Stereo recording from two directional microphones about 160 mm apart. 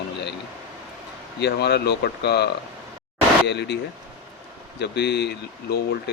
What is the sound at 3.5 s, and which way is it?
Speech, 90° left.